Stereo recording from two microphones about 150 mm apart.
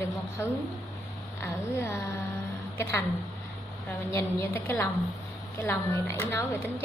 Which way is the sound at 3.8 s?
20° left (ahead or behind).